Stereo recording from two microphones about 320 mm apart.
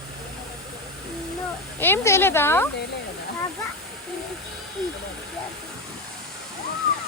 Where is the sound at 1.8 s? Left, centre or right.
Centre.